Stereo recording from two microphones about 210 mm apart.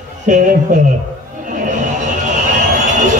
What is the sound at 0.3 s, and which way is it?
Speech, 35° right (ahead or behind).